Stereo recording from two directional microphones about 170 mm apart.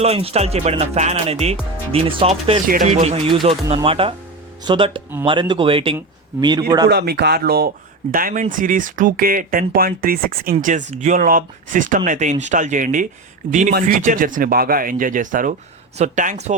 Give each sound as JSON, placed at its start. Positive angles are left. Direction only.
{"t": 0.0, "sound": "speech", "side_deg": -35}
{"t": 6.8, "sound": "speech", "side_deg": -70}
{"t": 8.1, "sound": "speech", "side_deg": -55}
{"t": 10.6, "sound": "speech", "side_deg": -50}